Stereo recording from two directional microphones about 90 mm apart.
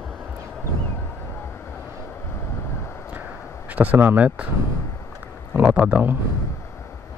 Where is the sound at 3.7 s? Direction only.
20° right (ahead or behind).